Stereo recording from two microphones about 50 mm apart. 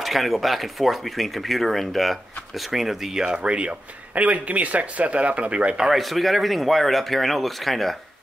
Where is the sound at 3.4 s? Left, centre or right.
Right.